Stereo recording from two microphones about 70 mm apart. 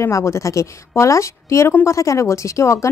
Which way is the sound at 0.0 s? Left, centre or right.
Left.